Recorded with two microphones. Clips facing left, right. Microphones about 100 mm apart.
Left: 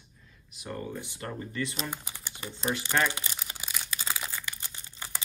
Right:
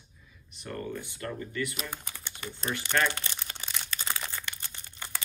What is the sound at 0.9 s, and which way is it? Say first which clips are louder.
Speech: right 1 dB; 20° left (ahead or behind).